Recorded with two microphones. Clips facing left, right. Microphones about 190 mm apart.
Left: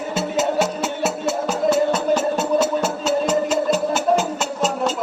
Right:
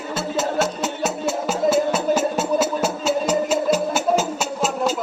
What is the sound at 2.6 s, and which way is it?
Music, 10° right (ahead or behind).